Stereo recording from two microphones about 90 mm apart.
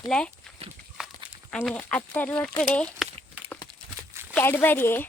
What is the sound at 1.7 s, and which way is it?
Speech, 15° left (ahead or behind).